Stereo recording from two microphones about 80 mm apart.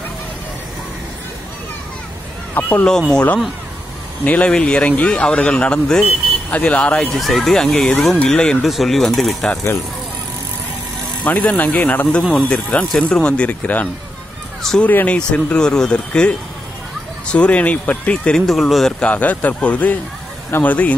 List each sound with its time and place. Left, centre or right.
2.5 s speech: left
2.9 s speech: centre
6.9 s speech: centre
11.2 s speech: centre
18.9 s speech: centre